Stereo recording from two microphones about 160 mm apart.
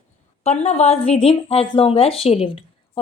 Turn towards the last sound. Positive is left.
turn(degrees=35)  # may be behind; listen again after turning